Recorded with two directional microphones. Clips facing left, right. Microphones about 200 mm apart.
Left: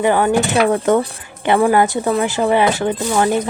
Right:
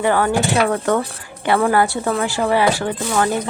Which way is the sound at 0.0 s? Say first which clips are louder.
Left 2 dB; 15° left (ahead or behind).